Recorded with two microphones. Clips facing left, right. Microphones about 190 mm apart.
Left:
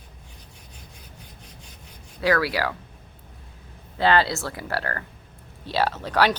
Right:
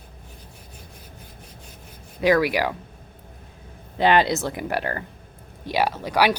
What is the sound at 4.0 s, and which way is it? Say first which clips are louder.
Speech: right 2 dB; 20° right (ahead or behind).